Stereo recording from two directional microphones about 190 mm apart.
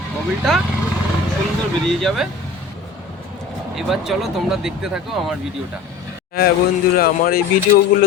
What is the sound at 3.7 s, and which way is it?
Speech, centre (ahead or behind).